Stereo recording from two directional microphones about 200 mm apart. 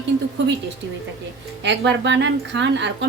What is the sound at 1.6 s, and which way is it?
Speech, 60° right (ahead or behind).